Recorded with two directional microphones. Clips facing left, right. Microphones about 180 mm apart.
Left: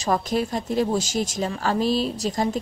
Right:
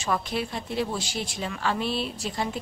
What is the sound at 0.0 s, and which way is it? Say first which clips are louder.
Speech: left 5 dB; 40° left (ahead or behind).